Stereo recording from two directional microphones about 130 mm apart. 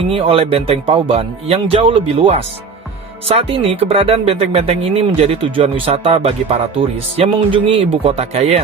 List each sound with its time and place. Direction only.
0.1 s speech: 50° right (ahead or behind)